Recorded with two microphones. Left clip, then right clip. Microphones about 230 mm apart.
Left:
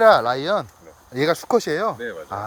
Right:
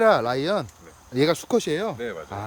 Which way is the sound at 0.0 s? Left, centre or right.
Centre.